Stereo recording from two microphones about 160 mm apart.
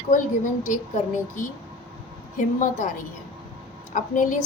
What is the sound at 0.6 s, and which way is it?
A woman's voice, 55° left (ahead or behind).